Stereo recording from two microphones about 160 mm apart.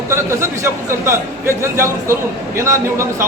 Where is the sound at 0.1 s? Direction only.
15° right (ahead or behind).